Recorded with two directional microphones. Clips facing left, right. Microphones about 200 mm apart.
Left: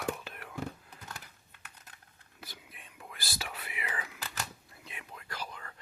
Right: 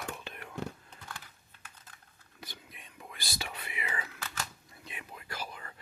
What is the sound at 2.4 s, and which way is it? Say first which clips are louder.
Whispering: right 1 dB; centre (ahead or behind).